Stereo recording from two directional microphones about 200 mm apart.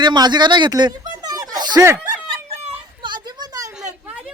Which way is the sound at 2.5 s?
25° right (ahead or behind).